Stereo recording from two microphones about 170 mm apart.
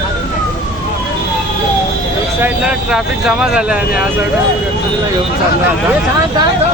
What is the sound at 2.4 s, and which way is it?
Speech, 5° right (ahead or behind).